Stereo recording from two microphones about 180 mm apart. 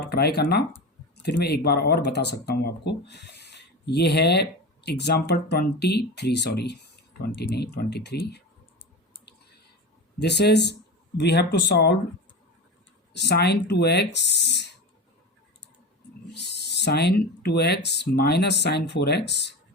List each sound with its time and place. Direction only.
0.1 s speech: 65° left (ahead or behind)
10.2 s speech: 70° left (ahead or behind)
13.1 s speech: 65° left (ahead or behind)
16.3 s speech: 70° left (ahead or behind)